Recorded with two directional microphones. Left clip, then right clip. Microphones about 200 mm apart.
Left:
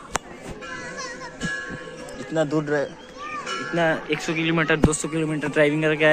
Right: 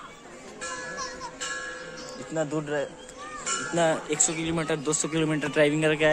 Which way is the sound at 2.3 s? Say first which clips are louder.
Left 6 dB; 5° left (ahead or behind).